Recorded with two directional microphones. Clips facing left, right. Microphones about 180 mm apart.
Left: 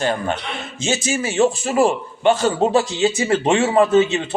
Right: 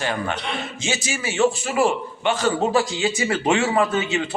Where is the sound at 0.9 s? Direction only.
25° left (ahead or behind).